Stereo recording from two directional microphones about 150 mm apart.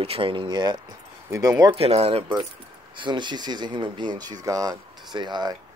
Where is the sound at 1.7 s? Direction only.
40° right (ahead or behind).